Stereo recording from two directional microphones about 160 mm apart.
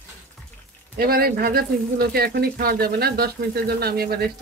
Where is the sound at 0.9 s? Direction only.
70° right (ahead or behind).